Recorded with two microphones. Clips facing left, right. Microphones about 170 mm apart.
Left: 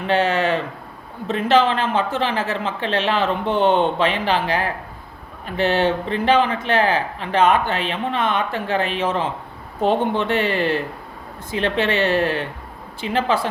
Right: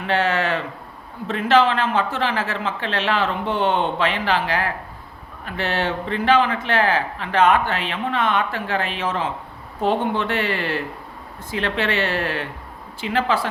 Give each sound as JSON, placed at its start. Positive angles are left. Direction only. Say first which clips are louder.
{"t": 0.1, "sound": "speech", "louder": "left 2 dB", "side_deg": 20}